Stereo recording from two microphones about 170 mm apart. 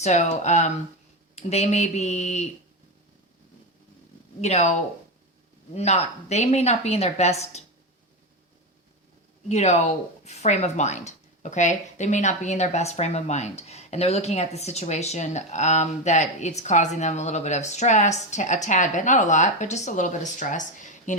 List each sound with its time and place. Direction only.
0.0 s speech: 45° left (ahead or behind)
4.4 s speech: 40° left (ahead or behind)
5.7 s speech: 40° left (ahead or behind)
9.5 s speech: 40° left (ahead or behind)